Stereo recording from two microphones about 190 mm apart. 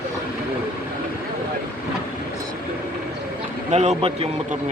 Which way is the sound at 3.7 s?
35° right (ahead or behind).